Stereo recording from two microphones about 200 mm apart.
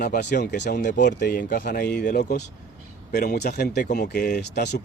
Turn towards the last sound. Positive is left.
turn(degrees=55)  # may be behind; listen again after turning